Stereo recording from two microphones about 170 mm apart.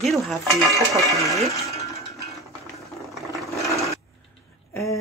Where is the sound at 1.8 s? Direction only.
20° left (ahead or behind).